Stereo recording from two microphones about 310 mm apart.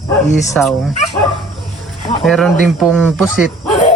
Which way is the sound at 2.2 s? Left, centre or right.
Centre.